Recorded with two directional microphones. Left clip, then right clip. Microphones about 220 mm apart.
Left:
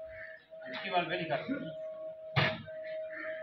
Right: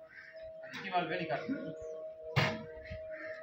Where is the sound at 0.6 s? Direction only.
10° left (ahead or behind).